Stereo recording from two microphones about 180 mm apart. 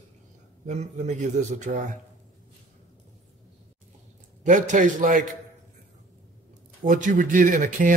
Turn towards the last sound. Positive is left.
turn(degrees=-50)  # may be behind; listen again after turning